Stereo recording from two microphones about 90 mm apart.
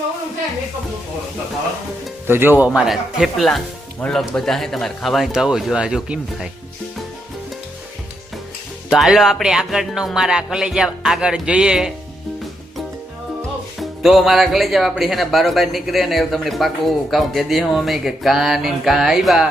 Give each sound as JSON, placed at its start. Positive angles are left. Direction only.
{"t": 2.2, "sound": "speech", "side_deg": -25}
{"t": 2.6, "sound": "speech", "side_deg": -5}
{"t": 8.9, "sound": "speech", "side_deg": 0}
{"t": 14.0, "sound": "speech", "side_deg": 0}